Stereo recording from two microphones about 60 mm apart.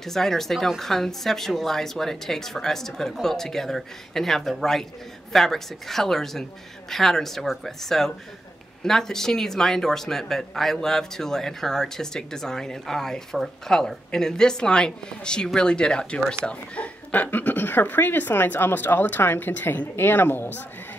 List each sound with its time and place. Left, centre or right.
0.0 s speech: centre; by 20.6 s left